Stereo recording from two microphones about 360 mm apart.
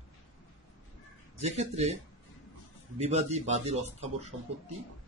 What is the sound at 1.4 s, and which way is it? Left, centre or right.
Speech, centre.